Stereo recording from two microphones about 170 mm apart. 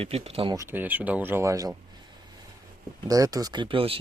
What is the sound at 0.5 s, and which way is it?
Speech, 15° right (ahead or behind).